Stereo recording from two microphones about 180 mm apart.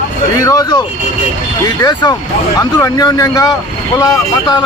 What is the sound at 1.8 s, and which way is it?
Speech, 20° left (ahead or behind).